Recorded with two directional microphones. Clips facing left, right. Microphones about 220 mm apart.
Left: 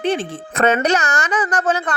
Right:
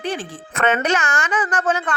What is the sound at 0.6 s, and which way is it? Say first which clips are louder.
A woman's voice: left 3 dB; 40° left (ahead or behind).